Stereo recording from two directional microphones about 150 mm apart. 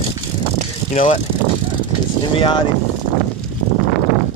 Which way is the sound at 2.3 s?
35° left (ahead or behind).